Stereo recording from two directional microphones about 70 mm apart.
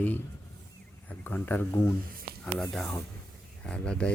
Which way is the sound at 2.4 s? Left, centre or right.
Centre.